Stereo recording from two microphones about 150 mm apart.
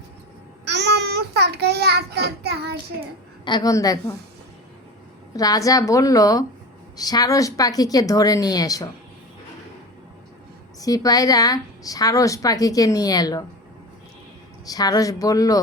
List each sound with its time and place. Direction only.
0.8 s child singing: 90° right
3.4 s a woman's voice: 25° left (ahead or behind)
5.3 s a woman's voice: 25° left (ahead or behind)
10.8 s a woman's voice: 25° left (ahead or behind)
14.7 s a woman's voice: 25° left (ahead or behind)